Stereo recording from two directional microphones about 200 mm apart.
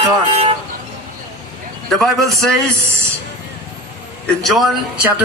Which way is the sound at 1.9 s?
Centre (ahead or behind).